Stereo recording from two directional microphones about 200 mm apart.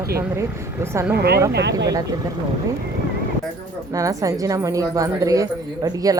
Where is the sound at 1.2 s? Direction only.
50° right (ahead or behind).